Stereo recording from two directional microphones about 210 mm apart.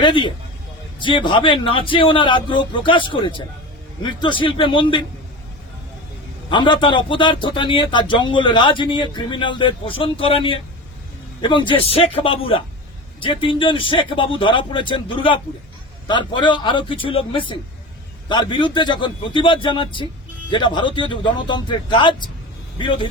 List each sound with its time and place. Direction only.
0.0 s a man's voice: 25° left (ahead or behind)
6.5 s a man's voice: 20° left (ahead or behind)